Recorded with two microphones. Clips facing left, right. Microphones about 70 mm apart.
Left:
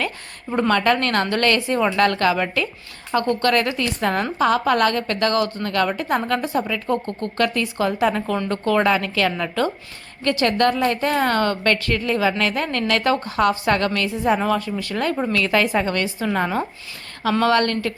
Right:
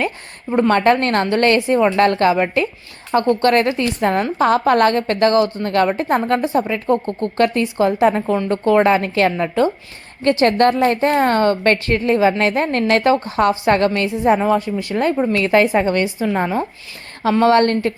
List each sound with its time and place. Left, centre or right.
0.7 s a woman's voice: right
6.4 s a woman's voice: right
17.4 s a woman's voice: right